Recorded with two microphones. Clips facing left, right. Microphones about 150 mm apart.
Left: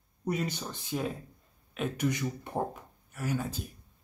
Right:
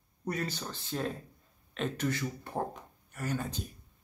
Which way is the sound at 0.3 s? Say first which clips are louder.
Left 3 dB; 20° left (ahead or behind).